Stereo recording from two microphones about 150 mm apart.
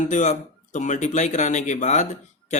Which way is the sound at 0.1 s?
55° left (ahead or behind).